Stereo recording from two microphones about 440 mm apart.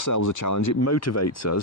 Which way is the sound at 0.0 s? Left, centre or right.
Left.